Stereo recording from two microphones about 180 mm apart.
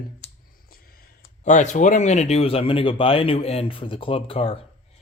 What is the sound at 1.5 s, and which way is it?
Speech, 45° left (ahead or behind).